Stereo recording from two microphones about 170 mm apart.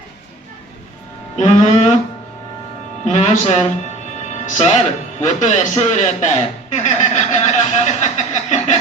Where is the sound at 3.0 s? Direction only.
45° left (ahead or behind).